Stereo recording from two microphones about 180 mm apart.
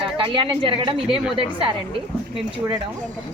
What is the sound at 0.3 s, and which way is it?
Speech, 30° right (ahead or behind).